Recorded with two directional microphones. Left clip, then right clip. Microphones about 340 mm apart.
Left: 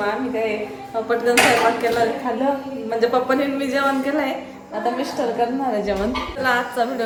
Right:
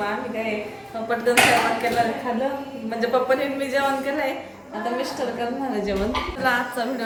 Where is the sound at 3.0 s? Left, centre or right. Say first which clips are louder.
Left 2 dB; centre.